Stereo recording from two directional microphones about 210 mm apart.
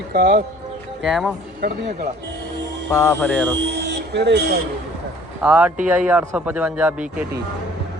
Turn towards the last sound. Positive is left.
turn(degrees=-5)  # may be behind; listen again after turning